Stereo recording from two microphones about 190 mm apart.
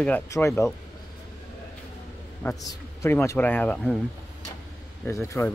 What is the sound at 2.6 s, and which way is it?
Speech, 15° left (ahead or behind).